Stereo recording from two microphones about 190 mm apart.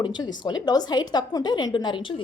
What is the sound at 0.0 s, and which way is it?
A woman's voice, 20° left (ahead or behind).